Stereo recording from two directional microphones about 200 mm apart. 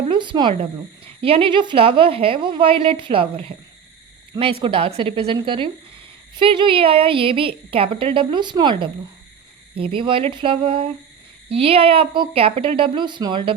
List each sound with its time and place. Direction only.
0.1 s a woman's voice: 25° right (ahead or behind)
4.6 s a woman's voice: 30° right (ahead or behind)